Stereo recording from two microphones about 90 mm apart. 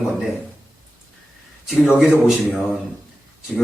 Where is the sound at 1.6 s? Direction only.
5° right (ahead or behind).